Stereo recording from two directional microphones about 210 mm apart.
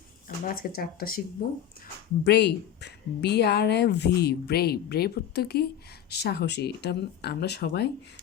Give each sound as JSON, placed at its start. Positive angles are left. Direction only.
{"t": 0.3, "sound": "a woman's voice", "side_deg": 45}
{"t": 2.2, "sound": "a woman's voice", "side_deg": 50}